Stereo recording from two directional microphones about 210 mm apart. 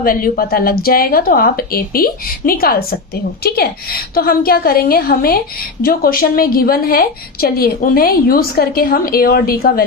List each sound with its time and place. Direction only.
0.0 s a woman's voice: 45° left (ahead or behind)